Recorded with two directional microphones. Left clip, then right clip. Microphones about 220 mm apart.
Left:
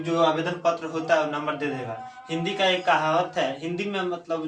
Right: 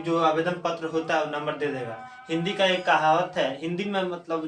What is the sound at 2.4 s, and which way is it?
Speech, 10° right (ahead or behind).